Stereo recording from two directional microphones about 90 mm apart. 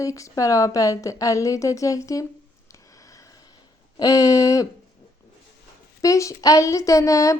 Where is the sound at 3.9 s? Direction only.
40° left (ahead or behind).